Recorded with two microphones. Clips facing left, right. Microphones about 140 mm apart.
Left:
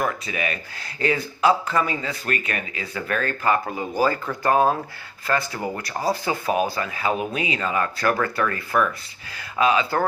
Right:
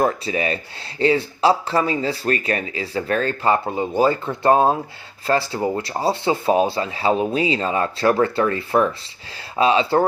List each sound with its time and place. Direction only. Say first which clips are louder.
0.0 s speech: right 6 dB; 30° right (ahead or behind)